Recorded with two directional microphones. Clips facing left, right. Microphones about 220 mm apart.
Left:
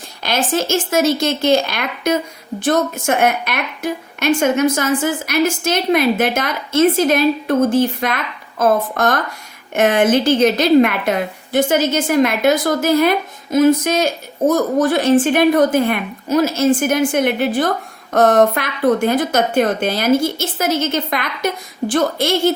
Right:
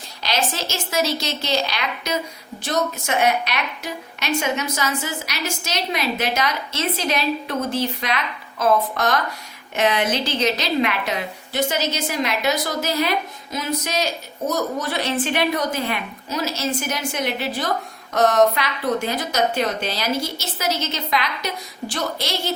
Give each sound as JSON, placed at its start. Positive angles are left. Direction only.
{"t": 0.2, "sound": "a woman's voice", "side_deg": 50}